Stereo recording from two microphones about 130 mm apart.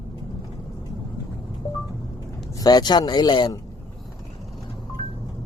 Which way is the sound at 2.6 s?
30° left (ahead or behind).